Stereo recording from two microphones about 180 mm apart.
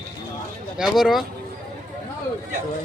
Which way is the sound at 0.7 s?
Centre (ahead or behind).